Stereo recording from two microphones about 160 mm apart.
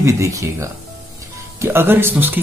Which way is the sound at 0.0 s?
20° right (ahead or behind).